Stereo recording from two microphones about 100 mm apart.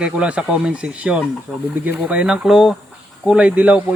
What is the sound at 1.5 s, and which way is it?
Speech, centre (ahead or behind).